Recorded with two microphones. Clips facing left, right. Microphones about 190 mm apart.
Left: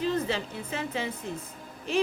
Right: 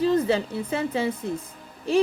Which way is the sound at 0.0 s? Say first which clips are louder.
Right 7 dB; 35° right (ahead or behind).